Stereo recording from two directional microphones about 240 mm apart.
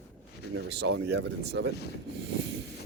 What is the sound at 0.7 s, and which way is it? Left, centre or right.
Speech, right.